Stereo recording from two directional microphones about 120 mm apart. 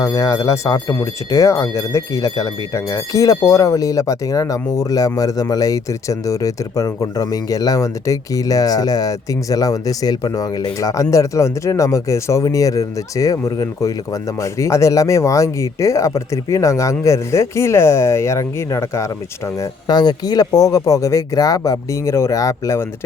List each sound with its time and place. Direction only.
0.0 s speech: 25° left (ahead or behind)